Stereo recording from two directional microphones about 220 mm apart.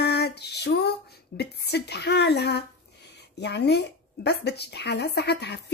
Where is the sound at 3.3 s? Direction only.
50° left (ahead or behind).